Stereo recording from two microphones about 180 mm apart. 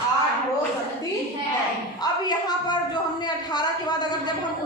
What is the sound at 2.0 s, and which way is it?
A woman's voice, 20° left (ahead or behind).